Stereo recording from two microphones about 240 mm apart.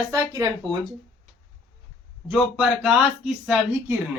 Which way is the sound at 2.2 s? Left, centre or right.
Centre.